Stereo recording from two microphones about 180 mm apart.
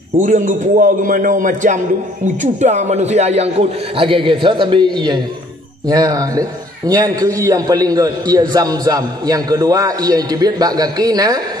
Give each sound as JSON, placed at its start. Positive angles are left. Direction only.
{"t": 0.2, "sound": "a man's voice", "side_deg": -45}